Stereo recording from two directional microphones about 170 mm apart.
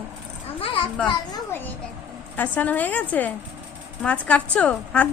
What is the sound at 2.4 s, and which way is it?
A man's voice, 10° left (ahead or behind).